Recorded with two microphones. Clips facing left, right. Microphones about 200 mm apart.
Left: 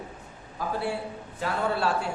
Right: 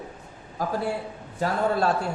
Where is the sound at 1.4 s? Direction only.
40° right (ahead or behind).